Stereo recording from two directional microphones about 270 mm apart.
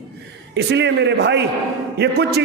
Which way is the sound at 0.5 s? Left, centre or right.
Right.